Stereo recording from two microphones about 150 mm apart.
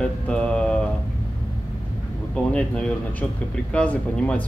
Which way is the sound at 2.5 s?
10° left (ahead or behind).